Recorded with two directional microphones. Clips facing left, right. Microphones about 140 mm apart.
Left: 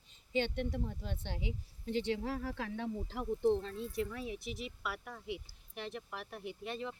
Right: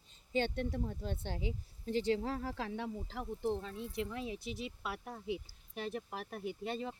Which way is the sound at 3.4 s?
5° right (ahead or behind).